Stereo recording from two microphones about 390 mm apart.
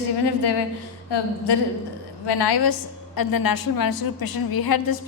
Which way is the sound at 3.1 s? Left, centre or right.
Left.